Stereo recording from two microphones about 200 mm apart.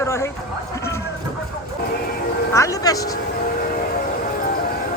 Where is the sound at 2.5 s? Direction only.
15° left (ahead or behind).